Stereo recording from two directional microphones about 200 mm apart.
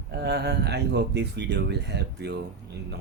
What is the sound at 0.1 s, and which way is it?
Speech, 55° right (ahead or behind).